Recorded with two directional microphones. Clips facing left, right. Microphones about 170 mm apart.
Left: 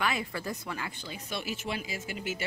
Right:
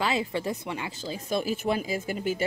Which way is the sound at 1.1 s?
40° right (ahead or behind).